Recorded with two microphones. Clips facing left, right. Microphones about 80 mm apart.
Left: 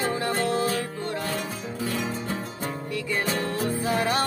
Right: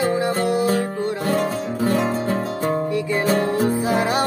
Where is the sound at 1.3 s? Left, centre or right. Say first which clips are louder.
Right 10 dB; right.